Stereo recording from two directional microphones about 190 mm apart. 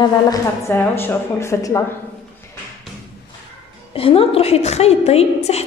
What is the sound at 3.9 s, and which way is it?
A woman's voice, 30° left (ahead or behind).